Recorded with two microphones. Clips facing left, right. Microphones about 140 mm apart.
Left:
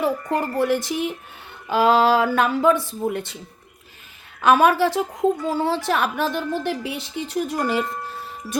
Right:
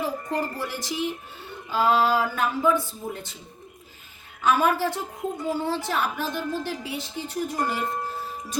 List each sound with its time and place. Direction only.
0.0 s speech: 60° left (ahead or behind)
1.7 s speech: 80° left
4.4 s a woman's voice: 75° left (ahead or behind)